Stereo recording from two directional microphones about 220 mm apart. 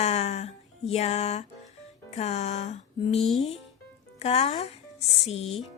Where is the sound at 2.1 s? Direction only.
30° left (ahead or behind).